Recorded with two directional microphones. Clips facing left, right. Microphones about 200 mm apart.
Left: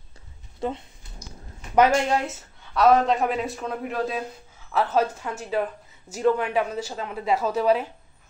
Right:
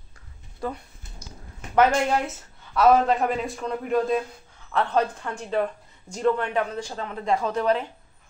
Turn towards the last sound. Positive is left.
turn(degrees=5)  # may be behind; listen again after turning